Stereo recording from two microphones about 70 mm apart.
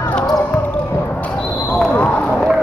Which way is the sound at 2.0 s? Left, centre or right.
Left.